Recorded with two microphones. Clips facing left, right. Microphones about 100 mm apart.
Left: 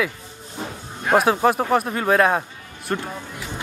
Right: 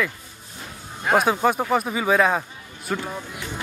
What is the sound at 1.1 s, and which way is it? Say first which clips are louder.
A man's voice: left 2 dB; centre (ahead or behind).